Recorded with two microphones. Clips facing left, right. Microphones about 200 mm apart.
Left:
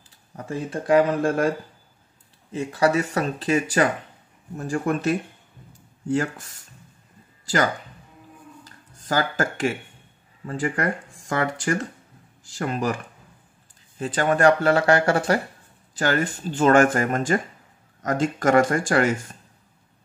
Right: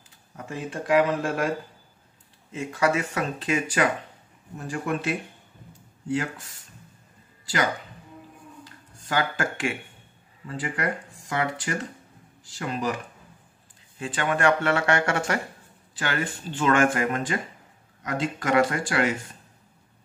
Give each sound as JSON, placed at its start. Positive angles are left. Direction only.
{"t": 0.4, "sound": "speech", "side_deg": 35}
{"t": 2.5, "sound": "speech", "side_deg": 35}
{"t": 9.0, "sound": "speech", "side_deg": 40}
{"t": 13.9, "sound": "speech", "side_deg": 40}